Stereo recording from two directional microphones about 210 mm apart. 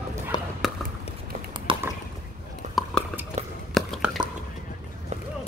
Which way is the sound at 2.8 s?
Centre (ahead or behind).